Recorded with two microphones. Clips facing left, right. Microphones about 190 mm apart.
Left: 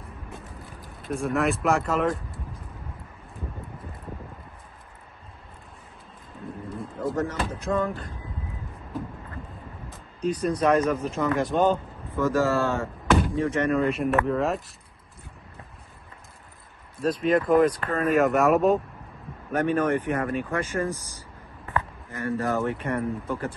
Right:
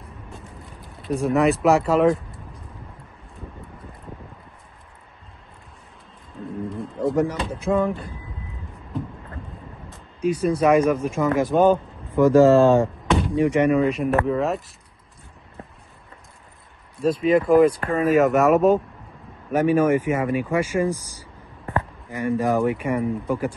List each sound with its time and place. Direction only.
1.1 s speech: centre (ahead or behind)
6.7 s a sound: centre (ahead or behind)
7.3 s speech: centre (ahead or behind)
10.2 s speech: 10° right (ahead or behind)
11.6 s speech: 15° right (ahead or behind)
13.7 s speech: centre (ahead or behind)
17.0 s speech: 5° right (ahead or behind)